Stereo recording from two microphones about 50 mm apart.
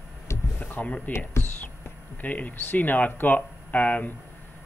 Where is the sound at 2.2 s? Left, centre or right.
Left.